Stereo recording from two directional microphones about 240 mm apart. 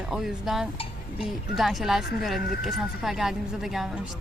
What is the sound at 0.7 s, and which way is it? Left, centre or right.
Dishes, left.